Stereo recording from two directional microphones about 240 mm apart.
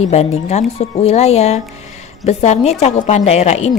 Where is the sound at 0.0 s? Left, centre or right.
Left.